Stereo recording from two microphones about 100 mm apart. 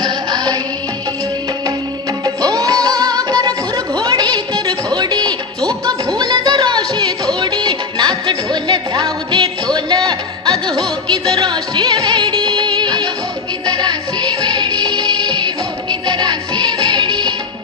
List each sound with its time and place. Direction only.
0.0 s music: 40° right (ahead or behind)
2.2 s music: 40° right (ahead or behind)